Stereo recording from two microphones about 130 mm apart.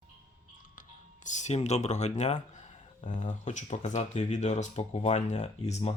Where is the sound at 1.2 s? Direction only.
65° left (ahead or behind).